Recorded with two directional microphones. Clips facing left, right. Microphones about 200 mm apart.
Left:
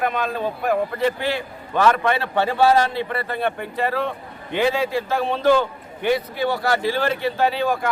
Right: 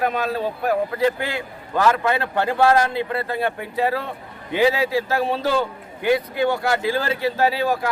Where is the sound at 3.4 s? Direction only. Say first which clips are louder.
Even; 10° right (ahead or behind).